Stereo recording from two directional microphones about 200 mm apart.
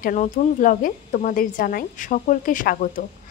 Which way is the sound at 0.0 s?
40° left (ahead or behind).